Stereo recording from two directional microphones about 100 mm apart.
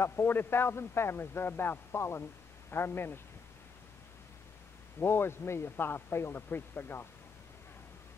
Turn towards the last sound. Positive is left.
turn(degrees=20)  # may be behind; listen again after turning